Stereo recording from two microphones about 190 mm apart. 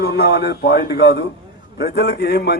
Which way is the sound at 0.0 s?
60° left (ahead or behind).